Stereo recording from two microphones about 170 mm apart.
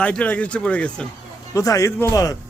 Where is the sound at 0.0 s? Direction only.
5° left (ahead or behind).